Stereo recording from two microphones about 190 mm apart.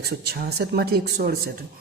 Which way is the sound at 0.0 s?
55° right (ahead or behind).